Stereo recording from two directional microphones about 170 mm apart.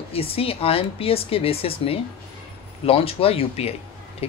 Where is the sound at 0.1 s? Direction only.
35° left (ahead or behind).